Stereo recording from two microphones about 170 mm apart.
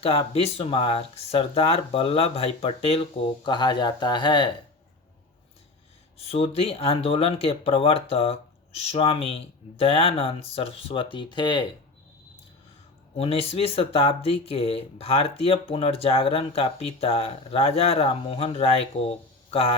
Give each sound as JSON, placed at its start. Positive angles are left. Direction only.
{"t": 0.0, "sound": "speech", "side_deg": 35}
{"t": 6.1, "sound": "speech", "side_deg": 35}
{"t": 13.1, "sound": "speech", "side_deg": 35}